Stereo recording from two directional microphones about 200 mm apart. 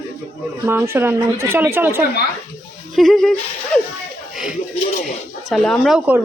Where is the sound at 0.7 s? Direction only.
10° right (ahead or behind).